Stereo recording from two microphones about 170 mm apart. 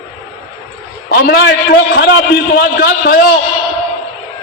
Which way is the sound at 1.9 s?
80° left.